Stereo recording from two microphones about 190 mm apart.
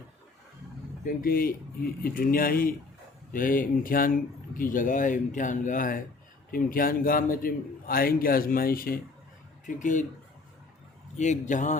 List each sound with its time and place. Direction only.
1.0 s a man's voice: 50° left (ahead or behind)
11.2 s a man's voice: 40° left (ahead or behind)